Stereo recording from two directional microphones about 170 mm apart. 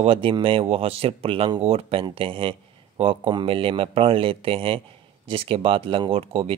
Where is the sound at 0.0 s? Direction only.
30° right (ahead or behind).